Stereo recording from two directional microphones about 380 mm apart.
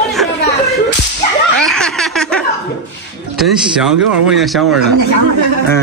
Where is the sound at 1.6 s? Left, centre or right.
Centre.